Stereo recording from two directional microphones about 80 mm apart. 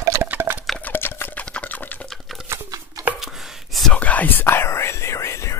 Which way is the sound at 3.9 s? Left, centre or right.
Centre.